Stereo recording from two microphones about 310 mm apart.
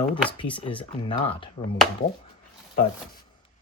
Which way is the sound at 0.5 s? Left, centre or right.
Centre.